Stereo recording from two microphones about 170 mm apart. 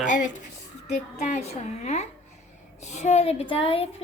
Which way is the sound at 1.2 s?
40° left (ahead or behind).